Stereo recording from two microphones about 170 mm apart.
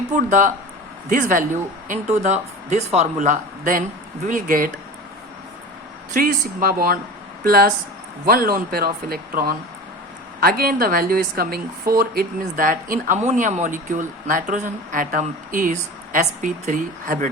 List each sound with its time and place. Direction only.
0.1 s a woman's voice: 50° right (ahead or behind)
6.1 s a woman's voice: 60° right (ahead or behind)